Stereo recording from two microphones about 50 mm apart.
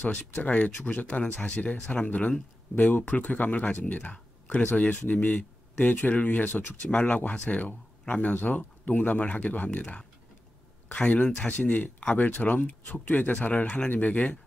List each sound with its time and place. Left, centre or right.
0.1 s speech: left
11.5 s speech: left